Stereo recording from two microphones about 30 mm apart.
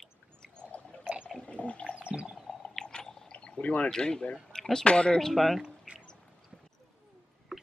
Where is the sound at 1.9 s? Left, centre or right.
Right.